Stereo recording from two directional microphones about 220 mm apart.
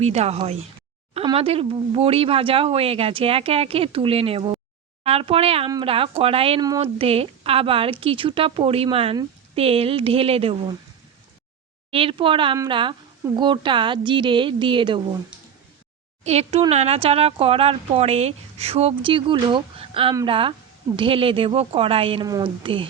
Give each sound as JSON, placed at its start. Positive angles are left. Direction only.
{"t": 0.0, "sound": "speech", "side_deg": -30}
{"t": 11.9, "sound": "speech", "side_deg": -25}
{"t": 16.2, "sound": "speech", "side_deg": -30}